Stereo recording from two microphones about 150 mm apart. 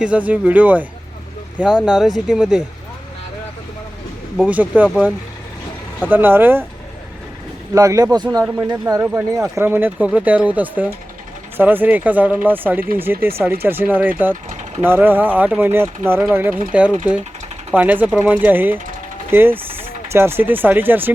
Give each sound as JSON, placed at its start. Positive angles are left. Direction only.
{"t": 0.0, "sound": "speech", "side_deg": -10}
{"t": 4.4, "sound": "speech", "side_deg": -10}
{"t": 7.7, "sound": "speech", "side_deg": -20}
{"t": 8.7, "sound": "speech", "side_deg": -15}